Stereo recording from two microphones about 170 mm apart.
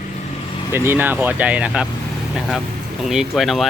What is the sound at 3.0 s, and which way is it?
Speech, centre (ahead or behind).